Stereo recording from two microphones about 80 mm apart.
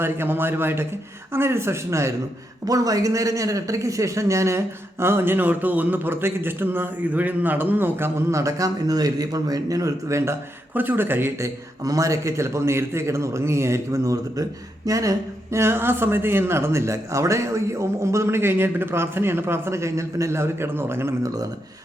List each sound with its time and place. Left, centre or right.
0.0 s a man's voice: right
10.8 s a man's voice: right